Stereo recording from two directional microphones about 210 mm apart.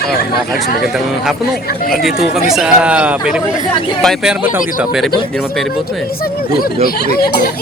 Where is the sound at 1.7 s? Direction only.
45° left (ahead or behind).